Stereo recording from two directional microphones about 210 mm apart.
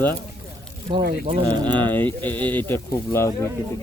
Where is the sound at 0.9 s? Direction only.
25° right (ahead or behind).